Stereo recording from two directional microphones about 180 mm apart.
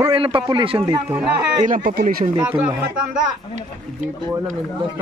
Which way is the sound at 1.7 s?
55° right (ahead or behind).